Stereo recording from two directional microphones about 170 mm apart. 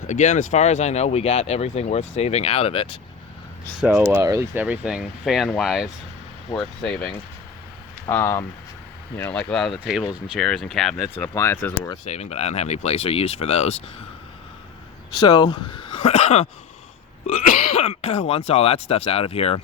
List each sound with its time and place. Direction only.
0.1 s speech: 45° left (ahead or behind)
3.8 s speech: 10° right (ahead or behind)
8.0 s speech: 15° left (ahead or behind)
11.2 s speech: 15° left (ahead or behind)
12.0 s speech: 40° left (ahead or behind)
15.1 s speech: 25° left (ahead or behind)